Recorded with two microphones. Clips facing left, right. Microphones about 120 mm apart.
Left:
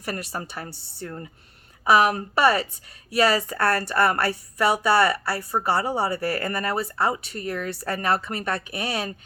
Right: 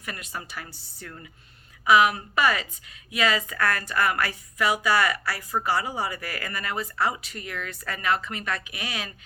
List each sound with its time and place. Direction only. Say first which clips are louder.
0.0 s a woman's voice: left 6 dB; 35° left (ahead or behind)